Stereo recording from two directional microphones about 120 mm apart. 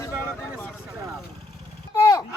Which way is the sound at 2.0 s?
25° left (ahead or behind).